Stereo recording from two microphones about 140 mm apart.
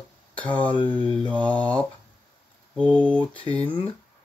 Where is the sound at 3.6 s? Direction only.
35° left (ahead or behind).